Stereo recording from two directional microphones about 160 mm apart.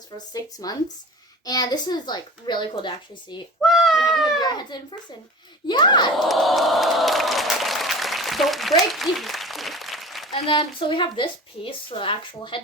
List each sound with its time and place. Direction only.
0.3 s a child's voice: 25° left (ahead or behind)
3.6 s speech: centre (ahead or behind)
4.4 s a child's voice: 25° left (ahead or behind)
6.1 s crowd: centre (ahead or behind)
10.3 s a woman's voice: 35° left (ahead or behind)